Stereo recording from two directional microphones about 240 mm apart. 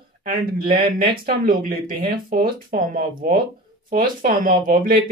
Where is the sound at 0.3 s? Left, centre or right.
Right.